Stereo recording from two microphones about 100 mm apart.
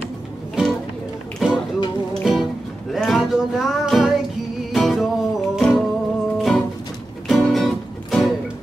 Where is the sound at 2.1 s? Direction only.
Centre (ahead or behind).